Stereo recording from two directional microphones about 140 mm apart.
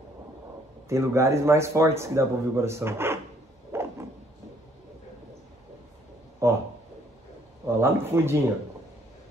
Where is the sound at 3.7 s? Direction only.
20° right (ahead or behind).